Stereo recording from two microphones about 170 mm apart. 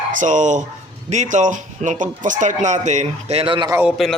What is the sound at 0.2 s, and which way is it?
A man's voice, 45° right (ahead or behind).